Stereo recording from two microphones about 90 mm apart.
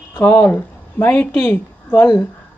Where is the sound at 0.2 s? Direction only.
25° left (ahead or behind).